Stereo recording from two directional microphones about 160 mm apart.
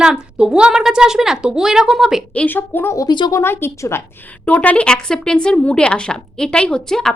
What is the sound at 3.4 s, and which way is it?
A woman's voice, 15° left (ahead or behind).